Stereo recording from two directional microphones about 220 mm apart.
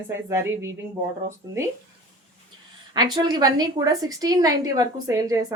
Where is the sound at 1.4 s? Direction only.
15° right (ahead or behind).